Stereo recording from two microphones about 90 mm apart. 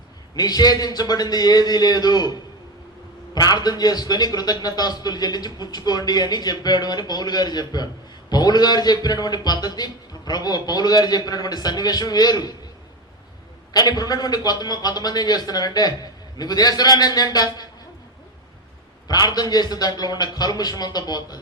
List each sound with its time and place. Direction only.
0.3 s a man's voice: 45° left (ahead or behind)
3.3 s a man's voice: 50° left (ahead or behind)
13.7 s a man's voice: 45° left (ahead or behind)
19.0 s a man's voice: 50° left (ahead or behind)